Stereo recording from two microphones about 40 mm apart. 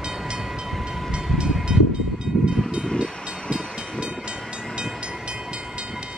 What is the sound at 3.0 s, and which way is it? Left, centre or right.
Train, right.